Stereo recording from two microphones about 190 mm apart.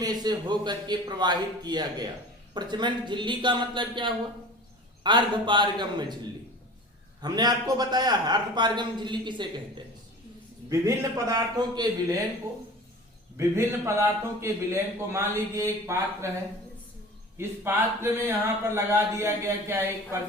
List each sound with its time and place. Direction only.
0.0 s a man's voice: 20° right (ahead or behind)
7.2 s a man's voice: 20° right (ahead or behind)
13.3 s speech: 15° right (ahead or behind)
17.3 s speech: 10° right (ahead or behind)